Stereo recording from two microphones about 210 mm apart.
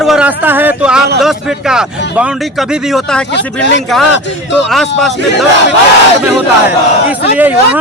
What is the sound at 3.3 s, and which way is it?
Speech, 55° left (ahead or behind).